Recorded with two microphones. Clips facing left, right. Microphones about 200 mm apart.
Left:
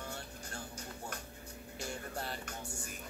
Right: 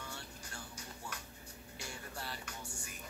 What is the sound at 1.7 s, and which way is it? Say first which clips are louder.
Music: left 6 dB; 50° left (ahead or behind).